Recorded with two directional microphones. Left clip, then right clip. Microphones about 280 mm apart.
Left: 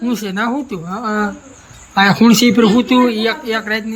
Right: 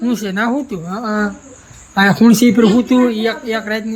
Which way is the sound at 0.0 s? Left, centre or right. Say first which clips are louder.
Right 1 dB; centre.